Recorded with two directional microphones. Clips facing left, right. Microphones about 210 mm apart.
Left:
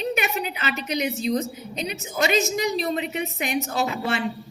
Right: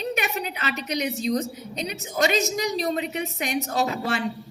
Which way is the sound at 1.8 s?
40° right (ahead or behind).